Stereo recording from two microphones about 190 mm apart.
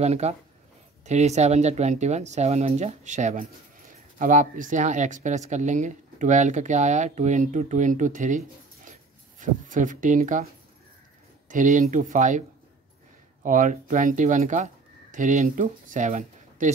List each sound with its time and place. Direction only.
0.0 s speech: 35° right (ahead or behind)
9.4 s speech: 40° right (ahead or behind)
11.4 s speech: 40° right (ahead or behind)